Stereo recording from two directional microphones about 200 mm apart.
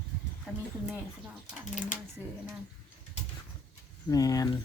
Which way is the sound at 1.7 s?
40° left (ahead or behind).